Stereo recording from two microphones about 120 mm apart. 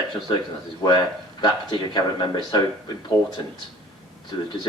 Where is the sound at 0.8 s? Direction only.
35° left (ahead or behind).